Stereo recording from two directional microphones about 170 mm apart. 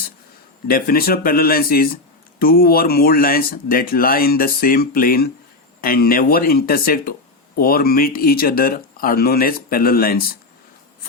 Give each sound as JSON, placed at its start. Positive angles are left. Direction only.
{"t": 0.7, "sound": "speech", "side_deg": 60}